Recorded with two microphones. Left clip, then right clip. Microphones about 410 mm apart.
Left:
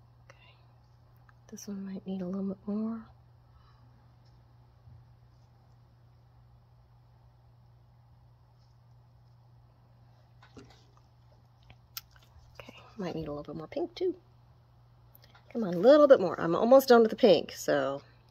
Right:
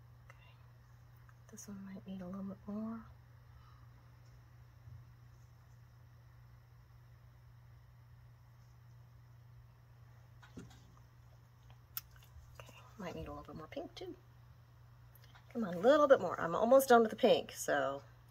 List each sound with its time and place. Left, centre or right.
0.3 s whispering: left
1.5 s speech: left
12.5 s whispering: left
15.5 s speech: left